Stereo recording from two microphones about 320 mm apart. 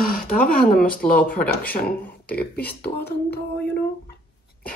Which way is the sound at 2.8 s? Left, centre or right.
Left.